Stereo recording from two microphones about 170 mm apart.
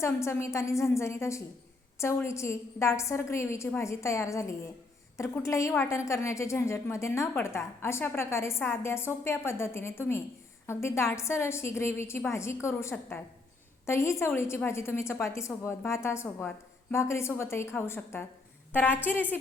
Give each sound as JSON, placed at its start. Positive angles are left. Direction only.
{"t": 0.0, "sound": "a woman's voice", "side_deg": 15}